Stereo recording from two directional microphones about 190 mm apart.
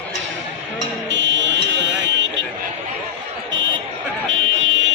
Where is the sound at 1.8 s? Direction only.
75° right (ahead or behind).